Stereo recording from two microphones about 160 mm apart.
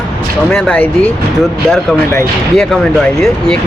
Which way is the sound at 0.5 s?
5° left (ahead or behind).